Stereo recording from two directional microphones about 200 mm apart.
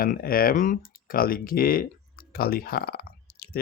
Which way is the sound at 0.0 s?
45° left (ahead or behind).